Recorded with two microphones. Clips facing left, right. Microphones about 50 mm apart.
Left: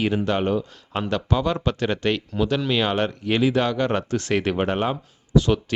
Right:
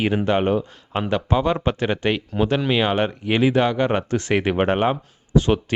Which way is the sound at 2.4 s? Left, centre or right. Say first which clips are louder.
Right 4 dB; right.